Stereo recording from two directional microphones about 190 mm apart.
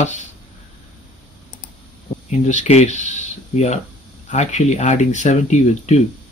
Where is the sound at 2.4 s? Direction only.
40° left (ahead or behind).